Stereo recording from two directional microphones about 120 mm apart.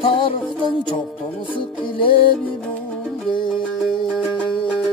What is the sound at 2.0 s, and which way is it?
Music, 45° left (ahead or behind).